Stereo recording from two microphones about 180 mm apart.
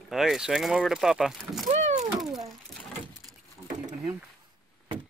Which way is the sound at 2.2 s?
Centre (ahead or behind).